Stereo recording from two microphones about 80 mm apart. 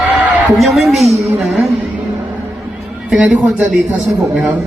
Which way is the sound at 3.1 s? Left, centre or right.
Centre.